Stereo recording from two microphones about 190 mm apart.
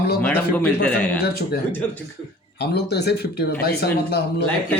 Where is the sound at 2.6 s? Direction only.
60° left (ahead or behind).